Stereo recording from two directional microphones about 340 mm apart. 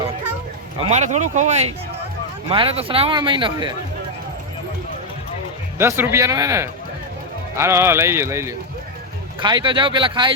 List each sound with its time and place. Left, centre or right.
0.8 s speech: centre
5.7 s speech: centre